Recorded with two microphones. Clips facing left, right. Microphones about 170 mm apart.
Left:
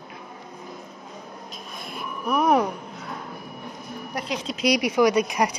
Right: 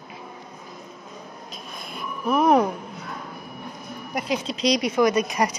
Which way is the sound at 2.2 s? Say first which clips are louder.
Right 2 dB; centre (ahead or behind).